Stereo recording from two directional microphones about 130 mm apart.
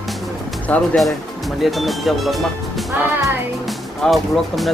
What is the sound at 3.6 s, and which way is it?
Speech, centre (ahead or behind).